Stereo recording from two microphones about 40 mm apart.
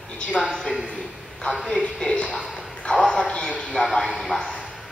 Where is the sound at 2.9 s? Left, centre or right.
Left.